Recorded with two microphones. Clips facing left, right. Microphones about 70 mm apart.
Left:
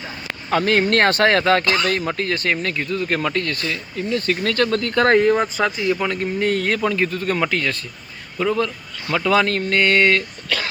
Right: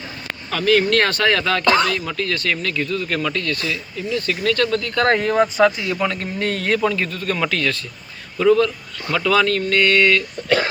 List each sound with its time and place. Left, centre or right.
0.5 s speech: left
1.6 s speech: right
1.9 s speech: left
5.0 s a man's voice: left; by 6.9 s centre
6.9 s speech: left
7.4 s a man's voice: centre; by 10.2 s left